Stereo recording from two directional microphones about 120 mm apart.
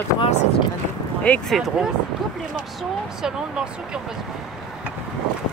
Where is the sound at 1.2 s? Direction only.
10° left (ahead or behind).